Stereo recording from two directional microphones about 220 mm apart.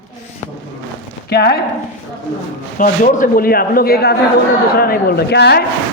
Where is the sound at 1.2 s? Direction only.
45° left (ahead or behind).